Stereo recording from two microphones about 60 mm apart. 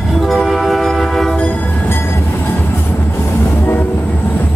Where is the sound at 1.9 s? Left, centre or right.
Left.